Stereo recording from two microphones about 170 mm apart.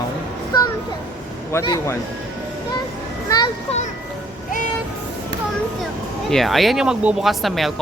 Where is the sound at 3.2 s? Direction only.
25° left (ahead or behind).